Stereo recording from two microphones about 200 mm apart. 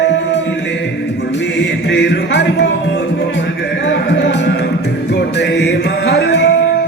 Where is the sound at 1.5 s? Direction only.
60° left (ahead or behind).